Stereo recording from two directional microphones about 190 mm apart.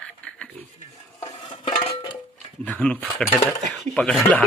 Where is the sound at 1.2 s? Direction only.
25° left (ahead or behind).